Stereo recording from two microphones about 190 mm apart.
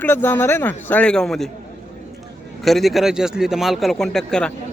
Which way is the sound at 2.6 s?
Centre (ahead or behind).